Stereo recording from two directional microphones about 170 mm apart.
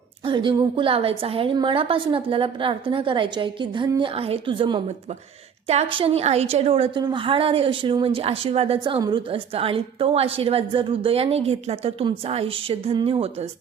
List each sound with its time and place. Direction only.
0.3 s a woman's voice: 30° right (ahead or behind)